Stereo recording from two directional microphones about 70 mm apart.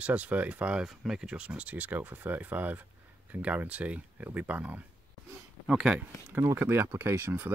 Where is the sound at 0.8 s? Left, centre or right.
Centre.